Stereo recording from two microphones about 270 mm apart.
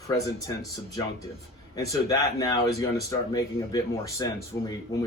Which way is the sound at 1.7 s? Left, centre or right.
Centre.